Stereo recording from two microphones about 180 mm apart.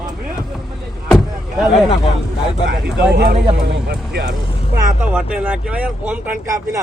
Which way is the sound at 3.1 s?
60° right (ahead or behind).